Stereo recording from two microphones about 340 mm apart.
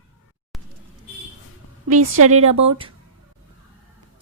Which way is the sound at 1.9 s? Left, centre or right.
Right.